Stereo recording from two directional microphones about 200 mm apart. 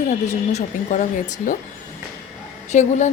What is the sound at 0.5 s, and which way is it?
Speech, 35° left (ahead or behind).